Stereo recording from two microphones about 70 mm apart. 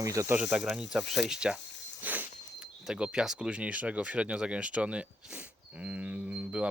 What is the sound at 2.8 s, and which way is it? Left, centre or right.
Speech, centre.